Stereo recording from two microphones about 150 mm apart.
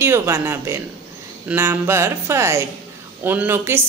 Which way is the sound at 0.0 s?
15° right (ahead or behind).